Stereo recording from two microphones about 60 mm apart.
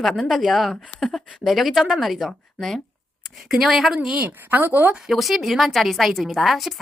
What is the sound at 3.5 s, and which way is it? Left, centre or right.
Speech, centre.